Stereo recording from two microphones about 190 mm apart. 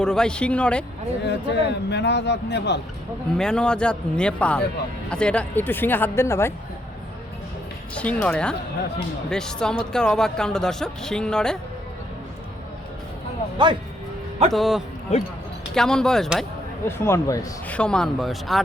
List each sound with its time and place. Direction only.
0.0 s speech: 5° left (ahead or behind)
1.2 s a man's voice: 65° left (ahead or behind)
3.3 s speech: 5° left (ahead or behind)
7.9 s speech: 5° left (ahead or behind)
14.5 s speech: centre (ahead or behind)
15.1 s speech: 35° left (ahead or behind)
15.7 s speech: 5° left (ahead or behind)
17.0 s speech: 15° left (ahead or behind)
17.7 s speech: 5° left (ahead or behind)